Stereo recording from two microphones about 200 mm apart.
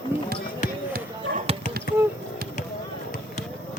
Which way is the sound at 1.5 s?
30° right (ahead or behind).